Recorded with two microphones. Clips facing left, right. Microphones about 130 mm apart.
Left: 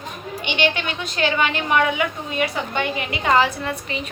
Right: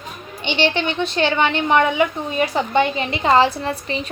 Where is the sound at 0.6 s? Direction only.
25° right (ahead or behind).